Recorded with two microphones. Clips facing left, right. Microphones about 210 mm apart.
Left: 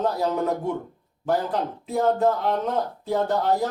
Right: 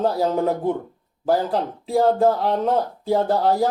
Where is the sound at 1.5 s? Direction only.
30° right (ahead or behind).